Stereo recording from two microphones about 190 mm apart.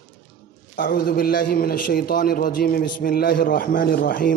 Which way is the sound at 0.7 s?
55° left (ahead or behind).